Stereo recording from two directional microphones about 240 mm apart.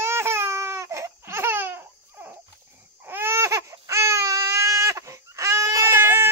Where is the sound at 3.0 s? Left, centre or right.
Centre.